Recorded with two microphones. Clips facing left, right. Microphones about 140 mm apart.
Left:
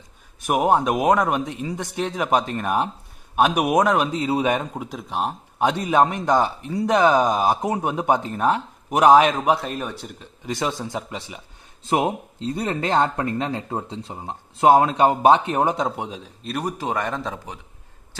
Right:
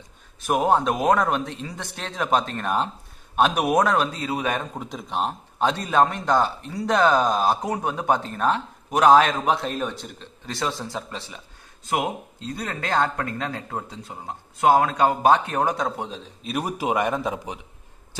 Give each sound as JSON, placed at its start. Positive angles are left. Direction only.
{"t": 0.4, "sound": "speech", "side_deg": 15}
{"t": 4.7, "sound": "speech", "side_deg": 5}
{"t": 5.6, "sound": "speech", "side_deg": 15}
{"t": 11.8, "sound": "speech", "side_deg": 25}
{"t": 16.4, "sound": "a man's voice", "side_deg": -5}